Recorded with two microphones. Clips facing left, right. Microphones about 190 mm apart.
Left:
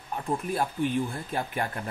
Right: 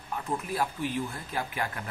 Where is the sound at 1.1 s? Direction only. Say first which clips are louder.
Left 3 dB; 30° left (ahead or behind).